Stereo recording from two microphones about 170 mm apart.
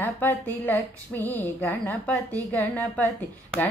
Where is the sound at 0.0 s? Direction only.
10° left (ahead or behind).